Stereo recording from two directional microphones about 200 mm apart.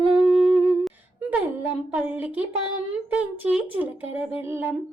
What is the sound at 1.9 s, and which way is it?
Speech, 5° right (ahead or behind).